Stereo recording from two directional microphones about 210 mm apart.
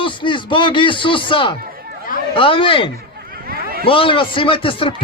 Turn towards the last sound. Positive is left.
turn(degrees=25)  # may be behind; listen again after turning